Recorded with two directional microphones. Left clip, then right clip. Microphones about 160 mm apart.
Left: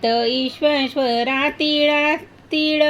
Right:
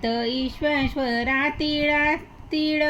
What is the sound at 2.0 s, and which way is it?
Speech, 60° left (ahead or behind).